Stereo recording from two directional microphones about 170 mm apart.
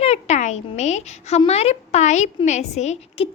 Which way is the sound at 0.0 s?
40° left (ahead or behind).